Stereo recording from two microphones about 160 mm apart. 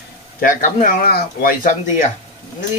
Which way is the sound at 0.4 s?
60° left (ahead or behind).